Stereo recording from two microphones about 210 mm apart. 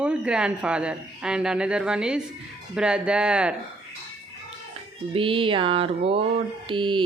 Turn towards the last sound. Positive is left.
turn(degrees=-25)  # may be behind; listen again after turning